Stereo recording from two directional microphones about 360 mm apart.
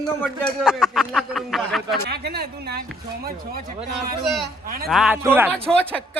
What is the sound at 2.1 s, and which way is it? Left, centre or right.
Speech, right.